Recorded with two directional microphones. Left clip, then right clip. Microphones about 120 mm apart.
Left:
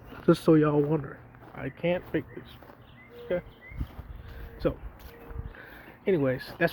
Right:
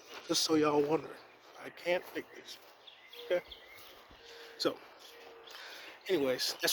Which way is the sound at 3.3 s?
30° right (ahead or behind).